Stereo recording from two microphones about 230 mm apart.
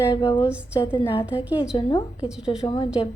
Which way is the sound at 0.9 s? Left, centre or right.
Left.